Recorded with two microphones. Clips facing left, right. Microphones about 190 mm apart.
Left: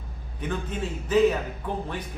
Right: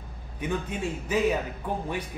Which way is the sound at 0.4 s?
10° right (ahead or behind).